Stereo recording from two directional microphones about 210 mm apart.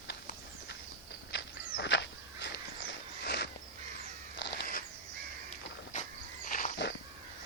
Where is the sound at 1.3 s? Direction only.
55° left (ahead or behind).